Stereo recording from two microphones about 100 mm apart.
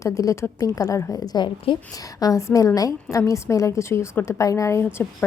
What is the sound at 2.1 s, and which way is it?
A woman's voice, 35° left (ahead or behind).